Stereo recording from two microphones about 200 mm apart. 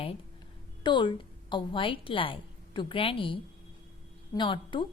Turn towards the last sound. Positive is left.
turn(degrees=25)  # may be behind; listen again after turning